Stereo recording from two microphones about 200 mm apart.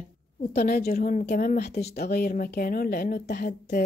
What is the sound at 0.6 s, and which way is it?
Speech, 50° left (ahead or behind).